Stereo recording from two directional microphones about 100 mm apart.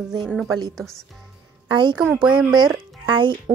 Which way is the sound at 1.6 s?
50° right (ahead or behind).